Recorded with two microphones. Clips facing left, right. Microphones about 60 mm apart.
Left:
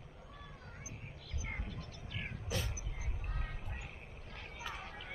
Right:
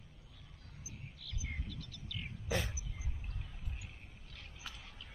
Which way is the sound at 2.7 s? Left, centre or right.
Left.